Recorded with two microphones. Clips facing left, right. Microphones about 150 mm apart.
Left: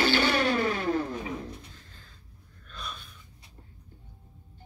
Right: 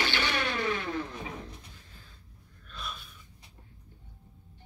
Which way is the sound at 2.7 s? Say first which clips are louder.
Even; 5° right (ahead or behind).